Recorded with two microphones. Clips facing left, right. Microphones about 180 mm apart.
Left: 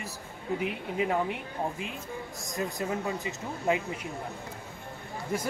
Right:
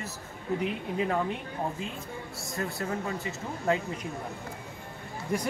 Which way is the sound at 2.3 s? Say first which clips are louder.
Left 1 dB; 15° left (ahead or behind).